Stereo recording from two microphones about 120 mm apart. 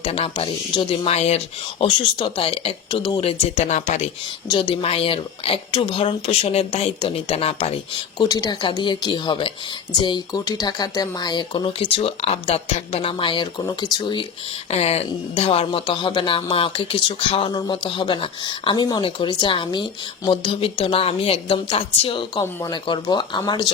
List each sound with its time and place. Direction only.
0.0 s speech: 50° left (ahead or behind)
1.8 s speech: 45° left (ahead or behind); by 4.1 s 75° left (ahead or behind)
4.4 s speech: 45° left (ahead or behind)
8.2 s speech: 35° left (ahead or behind)
14.7 s speech: 60° left (ahead or behind)
22.7 s speech: 40° left (ahead or behind)